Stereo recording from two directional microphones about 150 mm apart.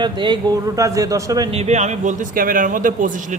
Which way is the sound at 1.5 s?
45° right (ahead or behind).